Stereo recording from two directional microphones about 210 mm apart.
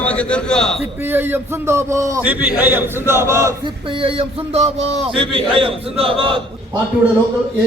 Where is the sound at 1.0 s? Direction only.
10° right (ahead or behind).